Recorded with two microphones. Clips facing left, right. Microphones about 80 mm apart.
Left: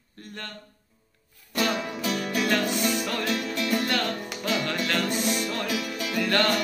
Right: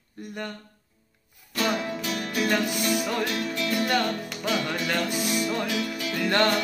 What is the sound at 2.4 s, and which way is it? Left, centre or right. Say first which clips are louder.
Music: right 1 dB; centre.